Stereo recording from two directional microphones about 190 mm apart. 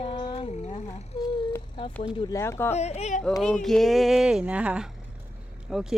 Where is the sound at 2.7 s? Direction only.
35° left (ahead or behind).